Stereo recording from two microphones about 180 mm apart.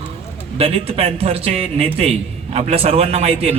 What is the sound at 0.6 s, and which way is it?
A man's voice, 35° right (ahead or behind).